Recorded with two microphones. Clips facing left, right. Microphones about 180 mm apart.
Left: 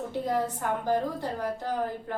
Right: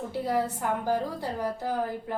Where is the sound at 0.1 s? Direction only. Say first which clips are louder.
Right 2 dB; 10° right (ahead or behind).